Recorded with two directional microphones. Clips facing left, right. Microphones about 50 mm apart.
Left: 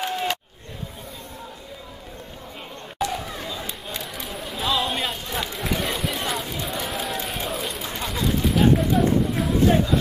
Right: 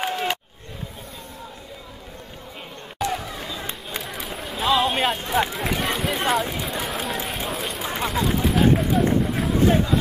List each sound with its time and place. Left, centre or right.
0.1 s a sound: centre
3.0 s chatter: centre
3.3 s a sound: centre
5.1 s speech: right
5.6 s speech: centre
6.6 s run: centre
8.0 s speech: centre